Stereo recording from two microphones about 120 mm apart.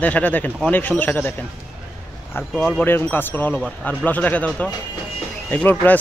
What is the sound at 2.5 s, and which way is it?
Speech, centre (ahead or behind).